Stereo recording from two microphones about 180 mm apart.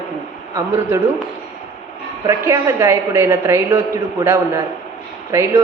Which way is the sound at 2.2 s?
15° right (ahead or behind).